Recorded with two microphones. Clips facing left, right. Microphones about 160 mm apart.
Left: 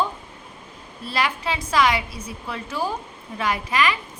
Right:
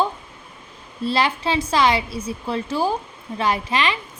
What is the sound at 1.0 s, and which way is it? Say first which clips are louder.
A child's voice: right 4 dB; 30° right (ahead or behind).